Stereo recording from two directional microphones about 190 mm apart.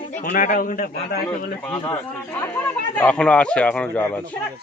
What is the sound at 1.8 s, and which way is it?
Speech, 10° left (ahead or behind).